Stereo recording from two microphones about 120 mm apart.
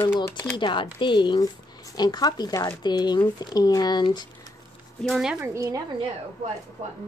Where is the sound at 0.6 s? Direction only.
40° left (ahead or behind).